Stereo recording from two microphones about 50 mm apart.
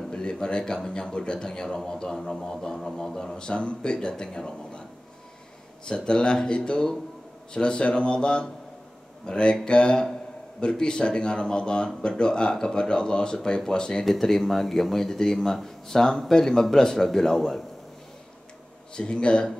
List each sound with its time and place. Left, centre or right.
0.1 s a man's voice: centre
5.9 s a man's voice: centre
14.0 s a man's voice: centre
18.9 s speech: centre